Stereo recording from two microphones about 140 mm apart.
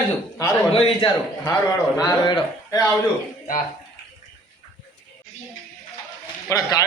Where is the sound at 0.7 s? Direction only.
40° left (ahead or behind).